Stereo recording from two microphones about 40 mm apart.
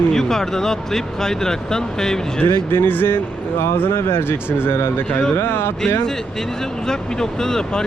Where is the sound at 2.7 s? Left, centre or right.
Left.